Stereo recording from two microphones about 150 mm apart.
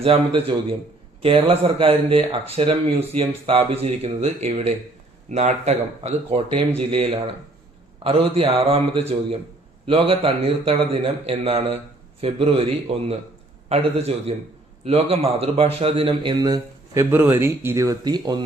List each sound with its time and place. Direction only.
0.0 s a man's voice: 40° right (ahead or behind)